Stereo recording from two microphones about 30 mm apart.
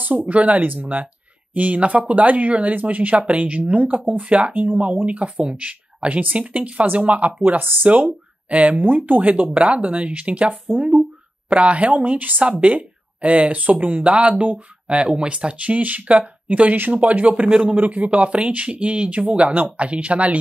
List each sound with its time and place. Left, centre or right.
0.0 s speech: right
1.5 s speech: right
4.3 s speech: right
9.3 s speech: right
10.8 s speech: right
11.4 s speech: right
12.4 s speech: right
15.5 s speech: right
16.4 s speech: right
17.3 s speech: right
17.7 s speech: right